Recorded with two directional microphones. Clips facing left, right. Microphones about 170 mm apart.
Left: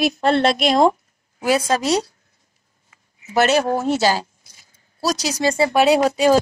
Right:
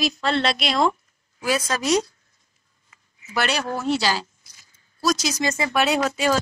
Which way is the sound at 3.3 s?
50° left (ahead or behind).